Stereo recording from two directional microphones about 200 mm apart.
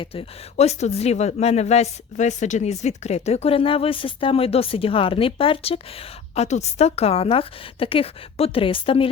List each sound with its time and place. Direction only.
0.0 s speech: 30° left (ahead or behind)